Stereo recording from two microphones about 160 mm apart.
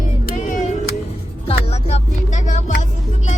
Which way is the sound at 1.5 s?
40° left (ahead or behind).